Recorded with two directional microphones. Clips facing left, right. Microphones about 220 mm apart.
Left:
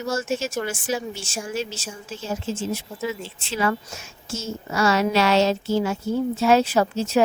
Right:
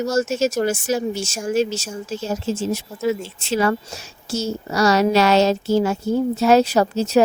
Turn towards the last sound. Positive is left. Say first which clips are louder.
# right 3 dB
turn(degrees=-40)  # may be behind; listen again after turning